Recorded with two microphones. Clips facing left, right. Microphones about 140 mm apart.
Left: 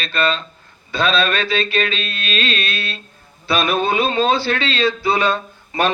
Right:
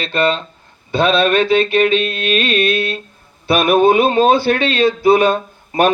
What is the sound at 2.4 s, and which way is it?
A man's voice, 50° right (ahead or behind).